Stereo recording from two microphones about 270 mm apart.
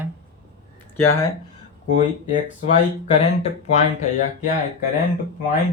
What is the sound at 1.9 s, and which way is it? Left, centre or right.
Speech, left.